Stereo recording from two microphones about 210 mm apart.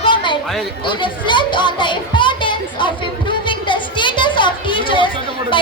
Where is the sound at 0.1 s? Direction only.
20° left (ahead or behind).